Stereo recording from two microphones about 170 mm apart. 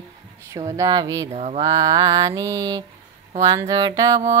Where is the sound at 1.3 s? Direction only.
40° right (ahead or behind).